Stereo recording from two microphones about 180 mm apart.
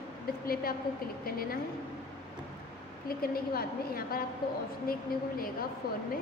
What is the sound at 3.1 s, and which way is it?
A woman's voice, 55° left (ahead or behind).